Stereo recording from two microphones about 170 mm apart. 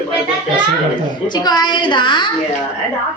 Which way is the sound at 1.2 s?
25° left (ahead or behind).